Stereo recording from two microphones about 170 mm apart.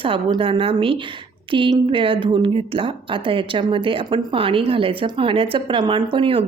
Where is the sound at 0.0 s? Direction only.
30° right (ahead or behind).